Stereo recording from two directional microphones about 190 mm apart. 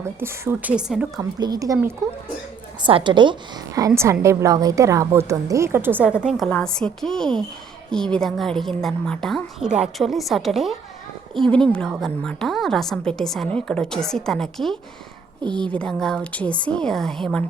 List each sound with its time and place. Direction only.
0.0 s a woman's voice: 10° right (ahead or behind)
1.2 s a woman's voice: 20° right (ahead or behind); by 17.4 s 5° left (ahead or behind)